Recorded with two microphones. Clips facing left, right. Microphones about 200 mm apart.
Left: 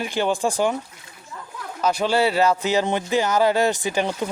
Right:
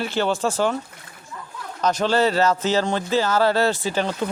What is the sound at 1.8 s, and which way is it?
Speech, 10° left (ahead or behind).